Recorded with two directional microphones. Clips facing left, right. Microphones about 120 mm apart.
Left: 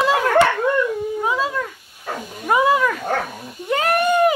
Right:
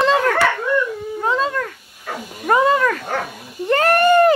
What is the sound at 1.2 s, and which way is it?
Cat, 10° left (ahead or behind).